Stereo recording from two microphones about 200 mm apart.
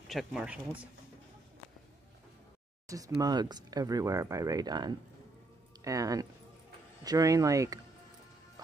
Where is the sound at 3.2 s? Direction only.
20° right (ahead or behind).